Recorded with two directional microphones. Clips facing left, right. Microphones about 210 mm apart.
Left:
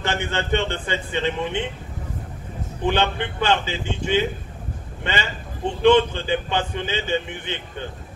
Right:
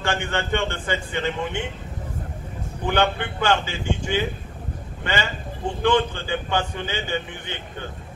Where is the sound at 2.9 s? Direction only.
20° left (ahead or behind).